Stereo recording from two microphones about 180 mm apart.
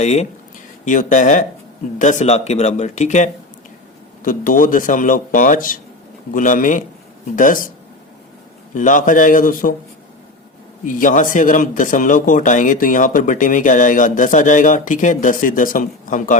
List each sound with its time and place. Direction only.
0.0 s speech: 40° left (ahead or behind)
8.7 s speech: 45° left (ahead or behind)
10.8 s speech: 45° left (ahead or behind)